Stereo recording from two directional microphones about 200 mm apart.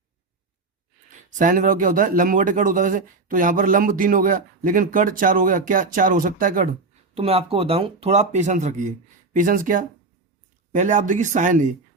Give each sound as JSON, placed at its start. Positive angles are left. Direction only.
{"t": 1.3, "sound": "speech", "side_deg": -40}
{"t": 7.1, "sound": "speech", "side_deg": -30}